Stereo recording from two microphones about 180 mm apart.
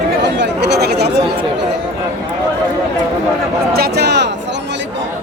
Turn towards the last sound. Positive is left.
turn(degrees=-70)  # may be behind; listen again after turning